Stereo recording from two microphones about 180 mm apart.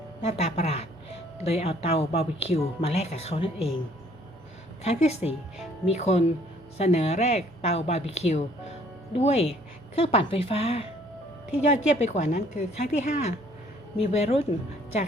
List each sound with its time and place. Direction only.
0.2 s speech: 35° left (ahead or behind)
4.8 s speech: 35° left (ahead or behind)